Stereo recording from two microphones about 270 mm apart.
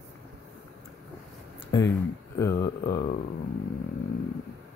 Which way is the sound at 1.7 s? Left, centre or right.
Centre.